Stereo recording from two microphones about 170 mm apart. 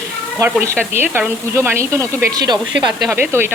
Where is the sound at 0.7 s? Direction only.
15° right (ahead or behind).